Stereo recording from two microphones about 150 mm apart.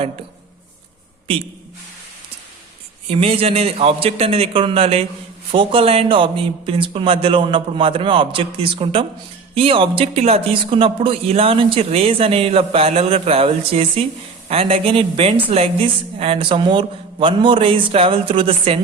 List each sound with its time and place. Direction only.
3.1 s speech: 40° right (ahead or behind)